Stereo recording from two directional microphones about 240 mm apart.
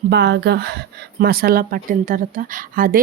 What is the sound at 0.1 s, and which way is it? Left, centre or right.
Speech, right.